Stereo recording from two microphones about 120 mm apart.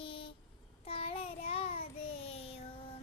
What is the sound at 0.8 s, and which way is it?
Child singing, 55° left (ahead or behind).